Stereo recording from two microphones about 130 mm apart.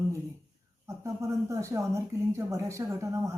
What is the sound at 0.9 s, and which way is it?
Speech, 25° right (ahead or behind).